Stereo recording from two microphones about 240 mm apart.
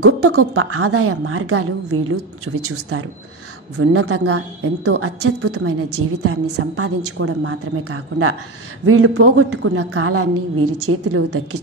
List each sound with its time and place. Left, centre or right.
0.0 s a woman's voice: right